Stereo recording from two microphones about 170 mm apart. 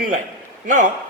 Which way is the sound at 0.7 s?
50° right (ahead or behind).